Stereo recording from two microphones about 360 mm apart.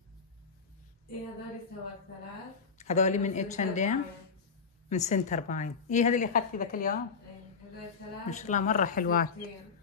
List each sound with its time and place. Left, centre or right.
2.8 s a woman's voice: centre
8.3 s a woman's voice: centre